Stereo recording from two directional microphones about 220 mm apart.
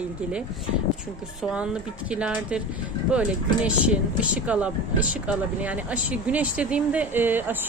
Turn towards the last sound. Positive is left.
turn(degrees=-10)  # may be behind; listen again after turning